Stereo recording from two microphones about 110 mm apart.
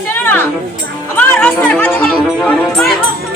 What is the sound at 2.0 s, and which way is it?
Music, 5° left (ahead or behind).